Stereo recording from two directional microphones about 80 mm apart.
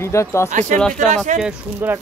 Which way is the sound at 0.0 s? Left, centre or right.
Left.